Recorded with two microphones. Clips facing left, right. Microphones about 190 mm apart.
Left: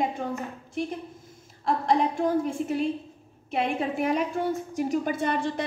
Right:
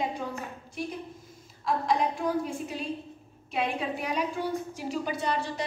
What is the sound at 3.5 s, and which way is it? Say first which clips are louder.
A woman's voice: left 3 dB; 50° left (ahead or behind).